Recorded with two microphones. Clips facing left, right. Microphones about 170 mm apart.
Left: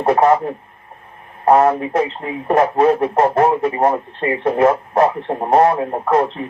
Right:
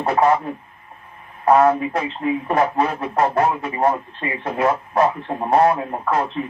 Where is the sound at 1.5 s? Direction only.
40° left (ahead or behind).